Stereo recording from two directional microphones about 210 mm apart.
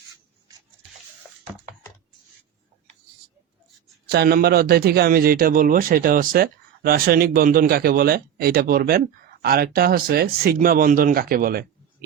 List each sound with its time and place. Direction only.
4.1 s a man's voice: 50° right (ahead or behind)